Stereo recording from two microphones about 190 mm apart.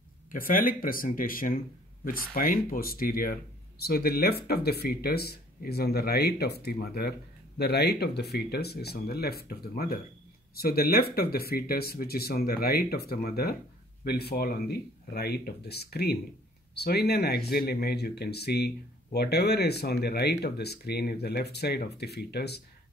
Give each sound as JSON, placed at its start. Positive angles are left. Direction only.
{"t": 0.3, "sound": "speech", "side_deg": 45}